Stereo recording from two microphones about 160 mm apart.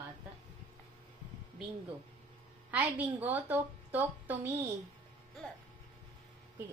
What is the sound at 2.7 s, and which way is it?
A woman's voice, 10° right (ahead or behind).